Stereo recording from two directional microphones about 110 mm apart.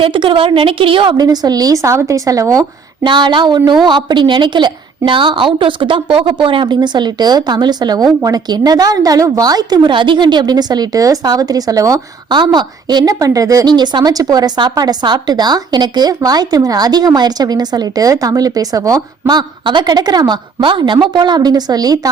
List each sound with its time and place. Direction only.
0.0 s a woman's voice: 50° right (ahead or behind)
1.1 s a woman's voice: 35° right (ahead or behind)